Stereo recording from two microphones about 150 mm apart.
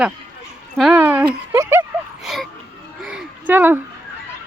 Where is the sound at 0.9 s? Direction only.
15° right (ahead or behind).